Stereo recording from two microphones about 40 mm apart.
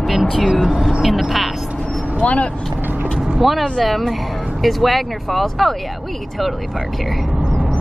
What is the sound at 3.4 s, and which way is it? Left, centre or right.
Speech, centre.